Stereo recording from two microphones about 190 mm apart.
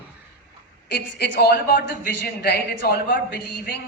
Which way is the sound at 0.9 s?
55° left (ahead or behind).